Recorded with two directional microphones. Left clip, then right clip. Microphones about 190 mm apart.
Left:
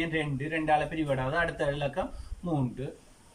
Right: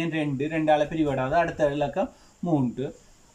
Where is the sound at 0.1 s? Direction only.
35° right (ahead or behind).